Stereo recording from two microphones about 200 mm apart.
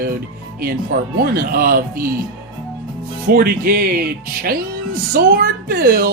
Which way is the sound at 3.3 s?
45° right (ahead or behind).